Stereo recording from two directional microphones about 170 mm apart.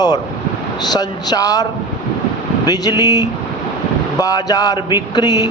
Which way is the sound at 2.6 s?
25° left (ahead or behind).